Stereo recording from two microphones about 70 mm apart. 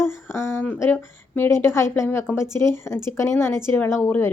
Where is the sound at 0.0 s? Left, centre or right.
Left.